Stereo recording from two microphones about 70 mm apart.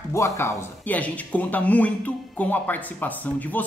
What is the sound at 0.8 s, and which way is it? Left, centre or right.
Speech, left.